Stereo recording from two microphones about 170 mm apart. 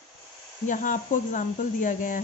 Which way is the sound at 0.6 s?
50° left (ahead or behind).